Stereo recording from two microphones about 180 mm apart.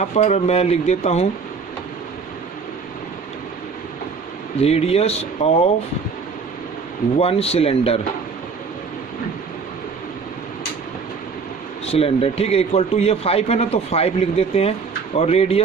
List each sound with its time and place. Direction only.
0.0 s a man's voice: 40° left (ahead or behind)
4.6 s a man's voice: 35° left (ahead or behind)
7.2 s a man's voice: 35° left (ahead or behind)
11.9 s a man's voice: 35° left (ahead or behind)